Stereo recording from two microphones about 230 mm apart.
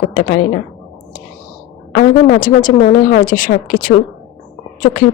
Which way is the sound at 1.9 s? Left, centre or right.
Left.